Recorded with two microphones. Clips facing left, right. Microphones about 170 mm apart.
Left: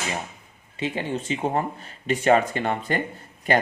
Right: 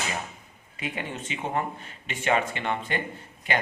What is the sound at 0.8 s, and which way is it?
Speech, 30° left (ahead or behind).